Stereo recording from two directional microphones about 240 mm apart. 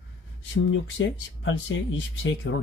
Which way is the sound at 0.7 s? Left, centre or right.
Left.